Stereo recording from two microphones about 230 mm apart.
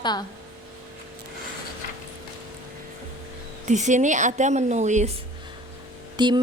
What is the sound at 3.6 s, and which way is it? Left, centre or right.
A woman's voice, right.